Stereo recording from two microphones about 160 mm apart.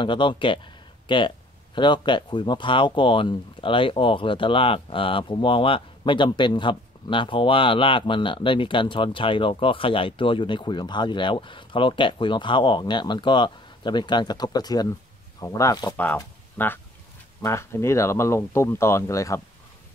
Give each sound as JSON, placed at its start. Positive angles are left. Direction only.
{"t": 0.0, "sound": "speech", "side_deg": 30}